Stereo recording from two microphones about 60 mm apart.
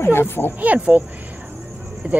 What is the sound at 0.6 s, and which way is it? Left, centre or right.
Speech, right.